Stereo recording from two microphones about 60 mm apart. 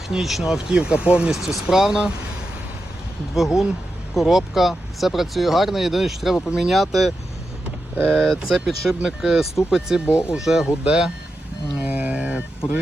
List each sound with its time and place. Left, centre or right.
0.1 s speech: centre
1.3 s speech: centre
3.3 s speech: centre
8.1 s speech: centre
8.4 s speech: centre
11.8 s a sound: right